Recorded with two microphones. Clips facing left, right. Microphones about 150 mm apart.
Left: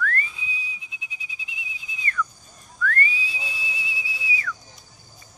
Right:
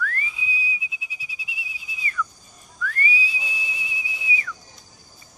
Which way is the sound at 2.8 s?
10° right (ahead or behind).